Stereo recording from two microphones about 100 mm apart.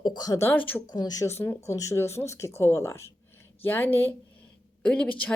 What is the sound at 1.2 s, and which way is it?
Speech, 25° left (ahead or behind).